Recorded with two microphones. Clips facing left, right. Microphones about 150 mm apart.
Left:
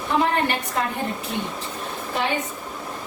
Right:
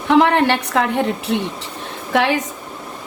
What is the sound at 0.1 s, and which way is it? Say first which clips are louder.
A woman's voice: right 8 dB; 85° right.